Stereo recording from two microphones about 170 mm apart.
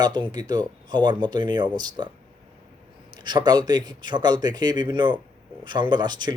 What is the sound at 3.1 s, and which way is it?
Speech, 25° right (ahead or behind).